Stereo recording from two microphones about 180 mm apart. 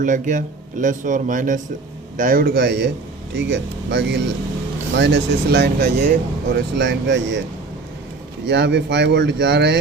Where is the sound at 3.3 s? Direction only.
85° right.